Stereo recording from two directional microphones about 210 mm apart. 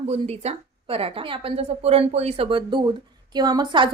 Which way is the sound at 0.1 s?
30° right (ahead or behind).